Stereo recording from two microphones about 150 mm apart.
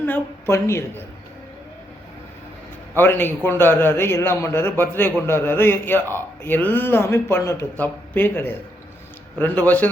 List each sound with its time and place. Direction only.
0.0 s a man's voice: 15° left (ahead or behind)
2.9 s a man's voice: 15° left (ahead or behind)